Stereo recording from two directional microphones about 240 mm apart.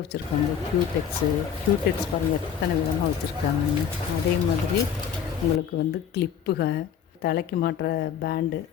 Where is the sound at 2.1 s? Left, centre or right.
Left.